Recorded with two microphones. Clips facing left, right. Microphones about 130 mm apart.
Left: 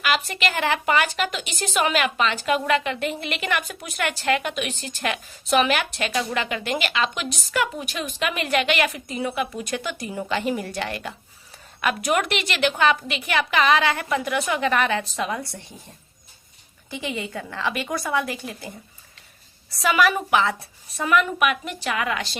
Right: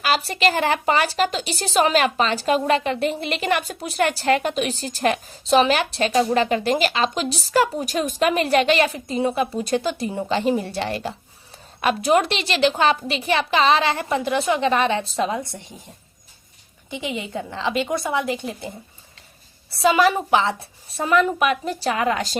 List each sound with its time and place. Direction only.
0.0 s a woman's voice: 35° right (ahead or behind)
16.9 s a woman's voice: 20° right (ahead or behind)
19.7 s a woman's voice: 25° right (ahead or behind)